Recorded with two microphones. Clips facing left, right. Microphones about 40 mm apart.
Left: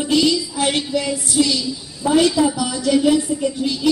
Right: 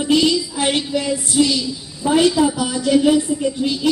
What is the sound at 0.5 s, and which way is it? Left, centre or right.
Speech, right.